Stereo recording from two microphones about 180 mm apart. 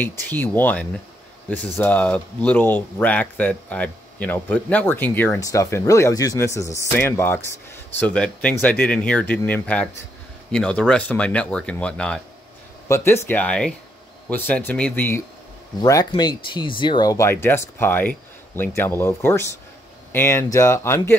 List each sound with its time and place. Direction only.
0.3 s speech: 10° left (ahead or behind)
15.8 s speech: 20° left (ahead or behind)